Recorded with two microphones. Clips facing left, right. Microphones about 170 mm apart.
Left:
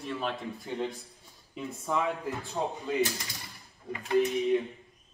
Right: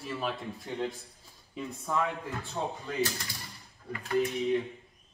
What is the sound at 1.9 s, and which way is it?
Speech, 15° left (ahead or behind).